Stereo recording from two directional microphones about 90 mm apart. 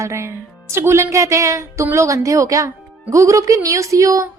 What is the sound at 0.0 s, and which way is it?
A woman's voice, 30° right (ahead or behind).